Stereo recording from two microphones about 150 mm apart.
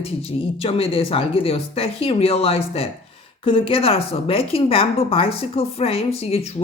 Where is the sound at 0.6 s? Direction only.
40° left (ahead or behind).